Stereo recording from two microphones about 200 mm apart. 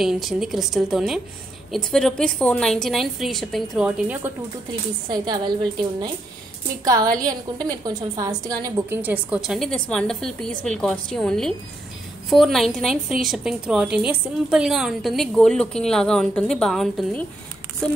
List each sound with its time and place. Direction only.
0.0 s a woman's voice: centre (ahead or behind)
5.1 s a woman's voice: 20° right (ahead or behind); by 17.2 s centre (ahead or behind)